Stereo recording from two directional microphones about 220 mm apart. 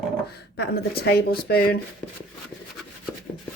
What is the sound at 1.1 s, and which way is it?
Speech, 45° left (ahead or behind).